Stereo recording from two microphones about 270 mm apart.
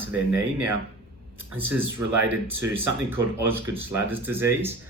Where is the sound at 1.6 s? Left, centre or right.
Centre.